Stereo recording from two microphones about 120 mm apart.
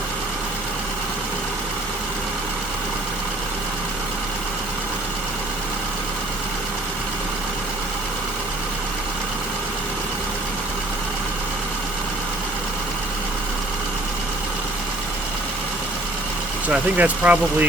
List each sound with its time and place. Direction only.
16.6 s speech: 10° right (ahead or behind)